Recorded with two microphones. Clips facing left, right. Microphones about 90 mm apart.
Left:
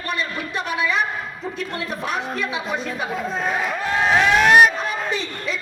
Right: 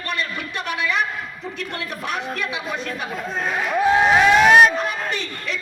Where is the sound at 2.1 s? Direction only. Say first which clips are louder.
Even; 30° left (ahead or behind).